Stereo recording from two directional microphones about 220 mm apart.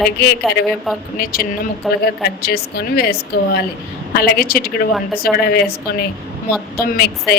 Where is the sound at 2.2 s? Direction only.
45° left (ahead or behind).